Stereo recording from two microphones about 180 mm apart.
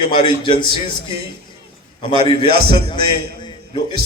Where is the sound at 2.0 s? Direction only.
25° left (ahead or behind).